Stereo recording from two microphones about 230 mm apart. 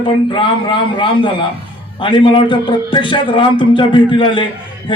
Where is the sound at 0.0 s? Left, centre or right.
Left.